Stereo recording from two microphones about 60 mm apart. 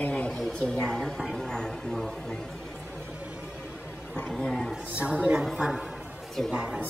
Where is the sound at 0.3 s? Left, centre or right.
Centre.